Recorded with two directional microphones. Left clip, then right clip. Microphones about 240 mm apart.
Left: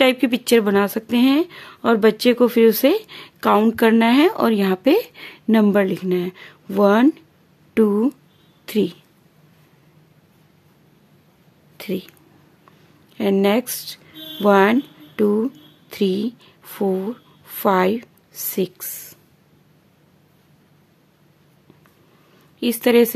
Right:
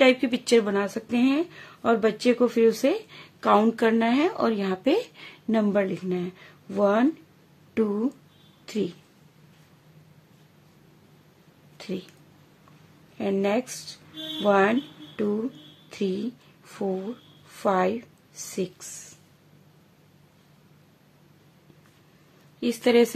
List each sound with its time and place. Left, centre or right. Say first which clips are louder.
0.0 s a woman's voice: left 3 dB; left
11.7 s a sound: left 7 dB; left
13.2 s a woman's voice: left 7 dB; left
22.6 s a woman's voice: left 5 dB; left